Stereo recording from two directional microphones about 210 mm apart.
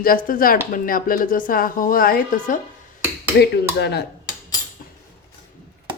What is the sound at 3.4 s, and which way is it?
Speech, 50° left (ahead or behind).